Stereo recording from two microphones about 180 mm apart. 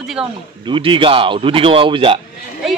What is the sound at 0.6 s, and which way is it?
A man's voice, 30° right (ahead or behind).